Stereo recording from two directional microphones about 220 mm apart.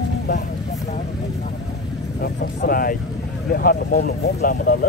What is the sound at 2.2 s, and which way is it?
Speech, 40° left (ahead or behind).